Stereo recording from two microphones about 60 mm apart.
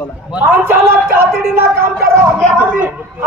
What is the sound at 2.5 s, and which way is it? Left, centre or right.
Speech, right.